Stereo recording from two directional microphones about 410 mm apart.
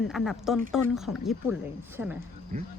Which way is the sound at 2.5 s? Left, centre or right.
Centre.